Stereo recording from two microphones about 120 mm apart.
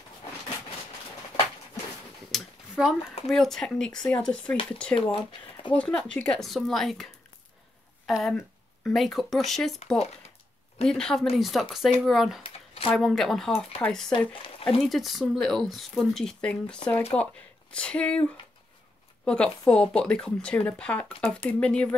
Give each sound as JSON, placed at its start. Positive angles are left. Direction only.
{"t": 2.3, "sound": "a sound", "side_deg": -5}
{"t": 3.3, "sound": "speech", "side_deg": 5}
{"t": 4.9, "sound": "speech", "side_deg": 45}
{"t": 5.8, "sound": "speech", "side_deg": 5}
{"t": 8.1, "sound": "speech", "side_deg": 0}
{"t": 10.8, "sound": "speech", "side_deg": 5}
{"t": 12.4, "sound": "a sound", "side_deg": 50}
{"t": 12.9, "sound": "speech", "side_deg": 5}
{"t": 14.1, "sound": "speech", "side_deg": 45}
{"t": 14.8, "sound": "speech", "side_deg": 0}
{"t": 19.2, "sound": "speech", "side_deg": 5}